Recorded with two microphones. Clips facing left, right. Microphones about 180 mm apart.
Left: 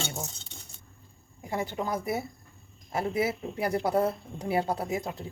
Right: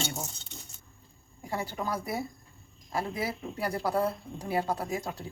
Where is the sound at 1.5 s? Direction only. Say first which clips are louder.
Left 2 dB; 20° left (ahead or behind).